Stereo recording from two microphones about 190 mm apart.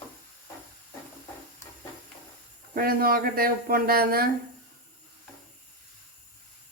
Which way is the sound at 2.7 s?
50° right (ahead or behind).